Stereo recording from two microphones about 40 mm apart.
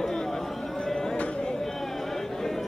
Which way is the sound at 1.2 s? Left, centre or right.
Left.